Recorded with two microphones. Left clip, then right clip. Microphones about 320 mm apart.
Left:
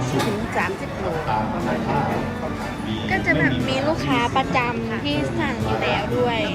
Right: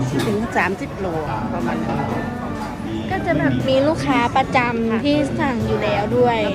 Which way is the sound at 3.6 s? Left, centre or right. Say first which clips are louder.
Right 5 dB; centre.